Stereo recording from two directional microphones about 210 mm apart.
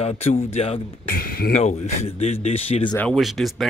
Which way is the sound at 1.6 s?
30° left (ahead or behind).